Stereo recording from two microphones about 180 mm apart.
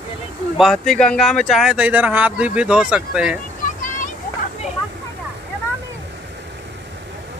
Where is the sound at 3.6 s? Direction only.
45° left (ahead or behind).